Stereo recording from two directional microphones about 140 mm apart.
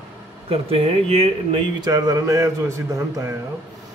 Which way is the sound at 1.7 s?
30° right (ahead or behind).